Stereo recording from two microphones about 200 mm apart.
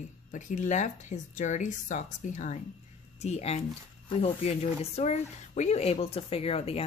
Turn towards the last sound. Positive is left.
turn(degrees=30)  # may be behind; listen again after turning